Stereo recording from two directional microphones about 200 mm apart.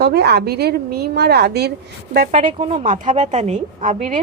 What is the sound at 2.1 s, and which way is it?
Speech, 40° right (ahead or behind).